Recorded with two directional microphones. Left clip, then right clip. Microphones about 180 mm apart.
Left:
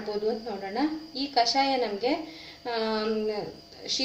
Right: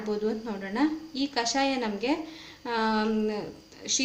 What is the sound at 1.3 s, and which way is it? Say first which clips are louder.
A woman's voice: left 4 dB; 45° right (ahead or behind).